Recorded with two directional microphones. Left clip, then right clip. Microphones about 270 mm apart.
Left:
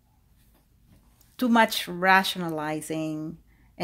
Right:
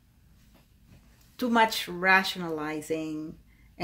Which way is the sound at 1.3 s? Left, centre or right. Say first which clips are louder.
Left 2 dB; left.